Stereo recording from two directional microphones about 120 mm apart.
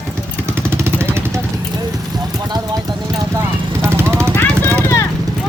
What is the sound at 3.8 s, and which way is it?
Vehicle, 20° right (ahead or behind).